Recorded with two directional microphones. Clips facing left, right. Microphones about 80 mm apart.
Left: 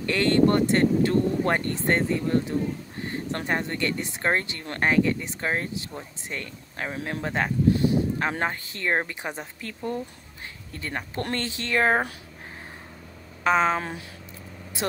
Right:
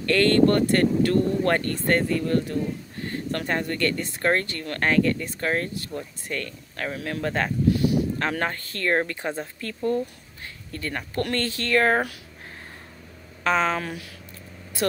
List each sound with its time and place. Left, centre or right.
0.0 s speech: centre
7.7 s a sound: left
8.2 s a woman's voice: centre
13.4 s speech: centre